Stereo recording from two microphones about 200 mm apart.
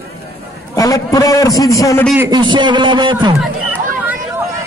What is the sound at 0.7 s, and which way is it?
A man's voice, 15° left (ahead or behind).